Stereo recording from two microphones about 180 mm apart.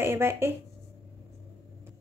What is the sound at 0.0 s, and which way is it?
Speech, 15° right (ahead or behind).